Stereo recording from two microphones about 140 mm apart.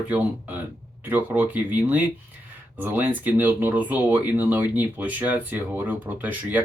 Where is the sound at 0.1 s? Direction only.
10° right (ahead or behind).